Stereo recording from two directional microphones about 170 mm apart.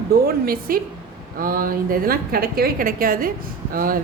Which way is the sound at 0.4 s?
60° right (ahead or behind).